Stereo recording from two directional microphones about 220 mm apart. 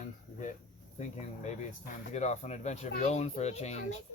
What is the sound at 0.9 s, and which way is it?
Speech, 30° left (ahead or behind).